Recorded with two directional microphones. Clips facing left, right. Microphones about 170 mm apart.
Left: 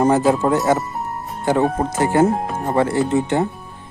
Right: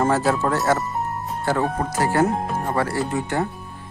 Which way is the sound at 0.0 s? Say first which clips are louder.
Left 4 dB; 20° left (ahead or behind).